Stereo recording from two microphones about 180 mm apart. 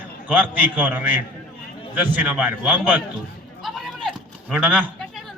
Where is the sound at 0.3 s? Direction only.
10° right (ahead or behind).